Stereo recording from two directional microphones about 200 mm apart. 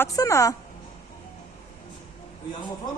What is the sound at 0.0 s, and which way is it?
Speech, 15° left (ahead or behind).